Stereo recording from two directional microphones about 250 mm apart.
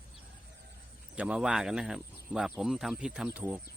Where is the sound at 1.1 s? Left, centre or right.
Centre.